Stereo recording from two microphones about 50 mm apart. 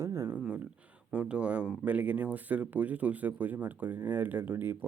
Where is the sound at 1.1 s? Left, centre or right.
Right.